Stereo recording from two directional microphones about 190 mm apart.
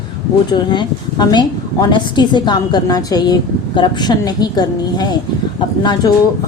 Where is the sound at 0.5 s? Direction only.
25° left (ahead or behind).